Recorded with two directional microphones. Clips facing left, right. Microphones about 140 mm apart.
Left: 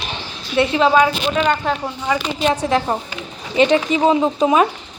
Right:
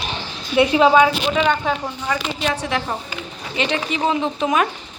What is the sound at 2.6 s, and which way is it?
Speech, 35° left (ahead or behind).